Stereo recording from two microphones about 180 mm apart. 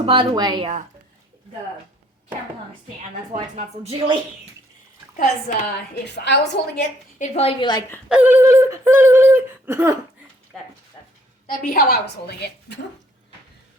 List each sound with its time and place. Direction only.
0.0 s a woman's voice: 30° right (ahead or behind)
3.3 s speech: 40° right (ahead or behind)
5.1 s a woman's voice: 45° left (ahead or behind)
6.1 s a woman's voice: 70° left (ahead or behind)
7.2 s a woman's voice: 35° left (ahead or behind)
8.1 s a sound: 10° right (ahead or behind)
10.5 s speech: centre (ahead or behind)
11.7 s a woman's voice: 55° left (ahead or behind)